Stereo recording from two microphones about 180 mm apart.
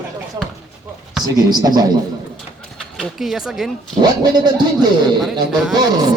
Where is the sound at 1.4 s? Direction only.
20° right (ahead or behind).